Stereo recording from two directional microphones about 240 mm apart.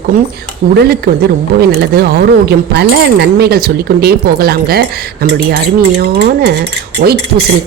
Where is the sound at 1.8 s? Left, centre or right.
Right.